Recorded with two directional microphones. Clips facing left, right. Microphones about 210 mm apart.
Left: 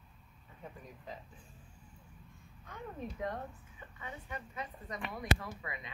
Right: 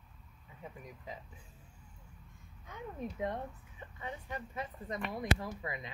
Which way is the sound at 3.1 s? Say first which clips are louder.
Right 2 dB; 20° right (ahead or behind).